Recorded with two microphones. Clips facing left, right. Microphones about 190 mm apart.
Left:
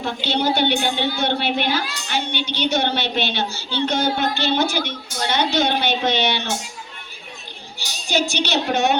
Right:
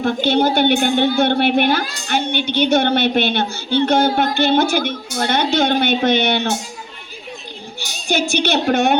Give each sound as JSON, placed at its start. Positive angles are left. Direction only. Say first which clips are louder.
{"t": 0.0, "sound": "a woman's voice", "louder": "right 6 dB", "side_deg": -50}
{"t": 7.8, "sound": "a woman's voice", "louder": "right 2 dB", "side_deg": -55}